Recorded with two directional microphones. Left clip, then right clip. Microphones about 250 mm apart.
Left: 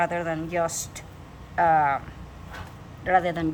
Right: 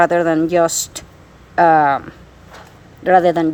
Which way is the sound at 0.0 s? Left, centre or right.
Right.